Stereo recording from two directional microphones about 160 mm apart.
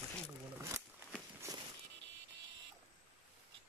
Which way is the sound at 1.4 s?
20° right (ahead or behind).